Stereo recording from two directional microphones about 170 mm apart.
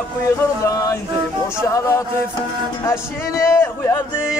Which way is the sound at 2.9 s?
15° left (ahead or behind).